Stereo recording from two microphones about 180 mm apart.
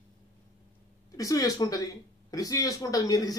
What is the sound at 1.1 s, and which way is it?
Speech, 20° left (ahead or behind).